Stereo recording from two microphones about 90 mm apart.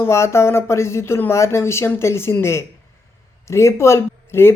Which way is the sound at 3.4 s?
30° left (ahead or behind).